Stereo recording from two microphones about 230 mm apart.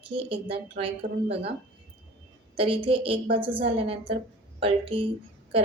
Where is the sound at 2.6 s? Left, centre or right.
Right.